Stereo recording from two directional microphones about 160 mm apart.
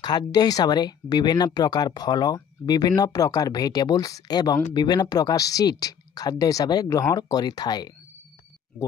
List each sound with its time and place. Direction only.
0.3 s speech: 25° left (ahead or behind)